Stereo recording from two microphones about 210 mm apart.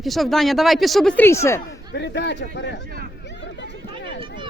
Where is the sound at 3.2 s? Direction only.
60° left (ahead or behind).